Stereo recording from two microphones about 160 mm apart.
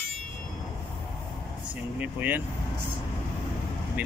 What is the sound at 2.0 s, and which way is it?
Speech, 10° right (ahead or behind).